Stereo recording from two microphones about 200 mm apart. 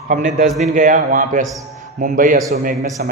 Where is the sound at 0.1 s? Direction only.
40° right (ahead or behind).